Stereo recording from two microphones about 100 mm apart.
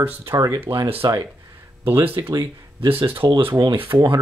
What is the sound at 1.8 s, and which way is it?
Speech, 25° right (ahead or behind).